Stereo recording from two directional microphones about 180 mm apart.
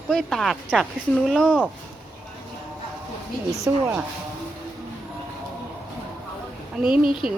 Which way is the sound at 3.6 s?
15° right (ahead or behind).